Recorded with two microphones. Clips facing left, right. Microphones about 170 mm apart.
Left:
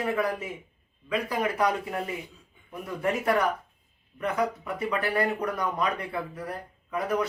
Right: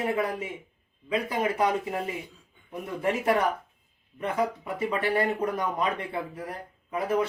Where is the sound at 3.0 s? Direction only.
25° right (ahead or behind).